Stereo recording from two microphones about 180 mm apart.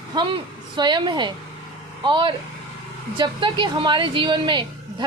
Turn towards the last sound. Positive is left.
turn(degrees=-25)  # may be behind; listen again after turning